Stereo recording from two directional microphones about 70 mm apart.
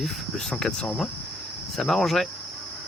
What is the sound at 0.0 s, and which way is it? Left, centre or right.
Speech, centre.